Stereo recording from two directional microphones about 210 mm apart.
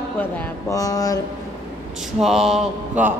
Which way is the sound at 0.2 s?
10° left (ahead or behind).